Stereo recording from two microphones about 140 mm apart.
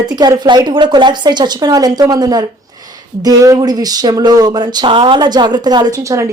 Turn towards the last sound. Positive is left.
turn(degrees=-25)  # may be behind; listen again after turning